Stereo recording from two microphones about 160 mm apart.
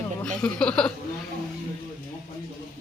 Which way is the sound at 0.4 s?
5° left (ahead or behind).